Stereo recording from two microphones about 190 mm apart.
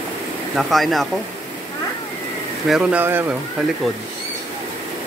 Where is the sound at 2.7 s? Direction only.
5° right (ahead or behind).